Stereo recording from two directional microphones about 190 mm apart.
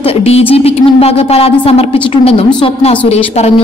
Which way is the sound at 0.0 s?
30° left (ahead or behind).